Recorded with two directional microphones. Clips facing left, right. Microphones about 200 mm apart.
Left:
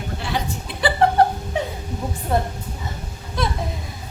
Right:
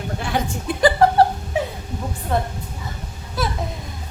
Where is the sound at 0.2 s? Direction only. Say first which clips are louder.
Right 2 dB; 50° right (ahead or behind).